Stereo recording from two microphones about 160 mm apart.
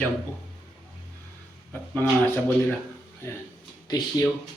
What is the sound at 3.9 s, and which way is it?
Speech, 25° left (ahead or behind).